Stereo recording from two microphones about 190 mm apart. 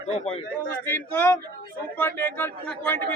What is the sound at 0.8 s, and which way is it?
A man's voice, 10° left (ahead or behind).